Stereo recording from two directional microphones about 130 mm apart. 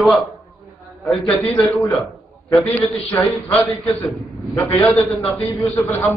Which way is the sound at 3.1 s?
25° left (ahead or behind).